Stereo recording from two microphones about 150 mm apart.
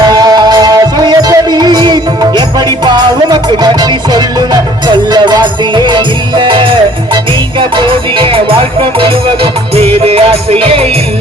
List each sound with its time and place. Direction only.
0.1 s music: 25° right (ahead or behind)